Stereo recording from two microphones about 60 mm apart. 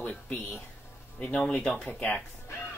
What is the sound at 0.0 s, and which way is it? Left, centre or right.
Speech, left.